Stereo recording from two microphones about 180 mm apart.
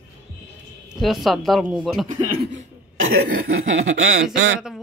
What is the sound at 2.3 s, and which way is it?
Speech, 60° right (ahead or behind).